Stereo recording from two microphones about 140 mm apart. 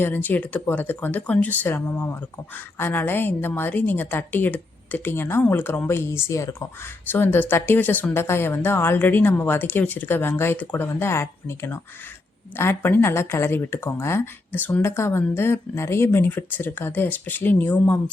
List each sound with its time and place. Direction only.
0.0 s speech: 15° left (ahead or behind)